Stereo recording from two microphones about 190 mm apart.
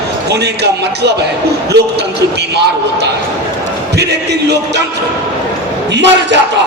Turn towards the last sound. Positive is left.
turn(degrees=-65)  # may be behind; listen again after turning